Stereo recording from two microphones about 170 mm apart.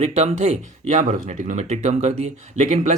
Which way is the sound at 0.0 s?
40° right (ahead or behind).